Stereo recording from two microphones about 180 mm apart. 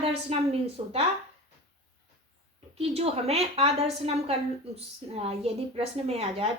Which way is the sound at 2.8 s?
35° right (ahead or behind).